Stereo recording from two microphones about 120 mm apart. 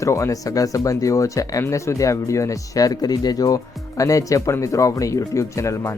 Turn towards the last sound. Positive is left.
turn(degrees=25)  # may be behind; listen again after turning